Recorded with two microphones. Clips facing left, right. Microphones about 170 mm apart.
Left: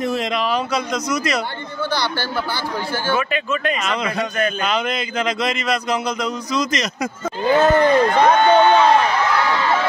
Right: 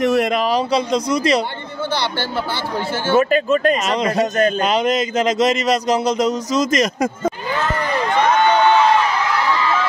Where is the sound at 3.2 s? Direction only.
40° right (ahead or behind).